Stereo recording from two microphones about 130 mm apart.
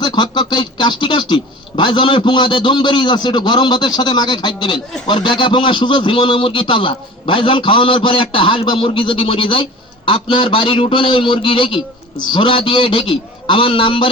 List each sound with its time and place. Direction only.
0.0 s speech: 35° left (ahead or behind)